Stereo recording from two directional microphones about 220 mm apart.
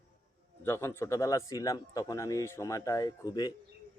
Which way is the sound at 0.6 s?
10° left (ahead or behind).